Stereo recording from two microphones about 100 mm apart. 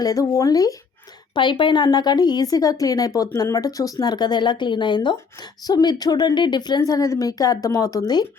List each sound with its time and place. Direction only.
0.0 s speech: 35° left (ahead or behind)
1.3 s speech: 55° left (ahead or behind)